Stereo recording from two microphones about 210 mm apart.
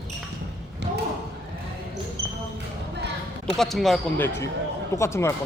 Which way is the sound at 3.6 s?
Centre (ahead or behind).